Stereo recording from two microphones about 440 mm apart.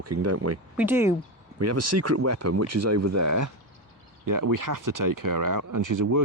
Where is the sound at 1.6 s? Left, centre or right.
Right.